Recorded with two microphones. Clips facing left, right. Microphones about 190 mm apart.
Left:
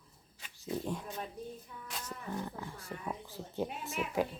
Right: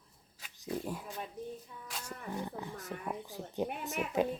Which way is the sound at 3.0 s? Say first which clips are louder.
Even; 15° right (ahead or behind).